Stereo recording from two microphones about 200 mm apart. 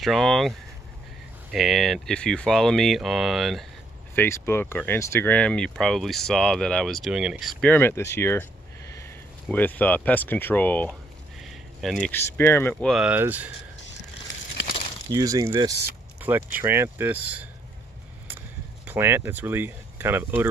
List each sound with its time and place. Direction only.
0.0 s speech: centre (ahead or behind)
4.1 s speech: 10° left (ahead or behind)
10.9 s a sound: centre (ahead or behind)
12.1 s speech: 10° left (ahead or behind)
12.9 s speech: 5° right (ahead or behind)
15.0 s speech: 20° right (ahead or behind)
18.9 s speech: 10° right (ahead or behind)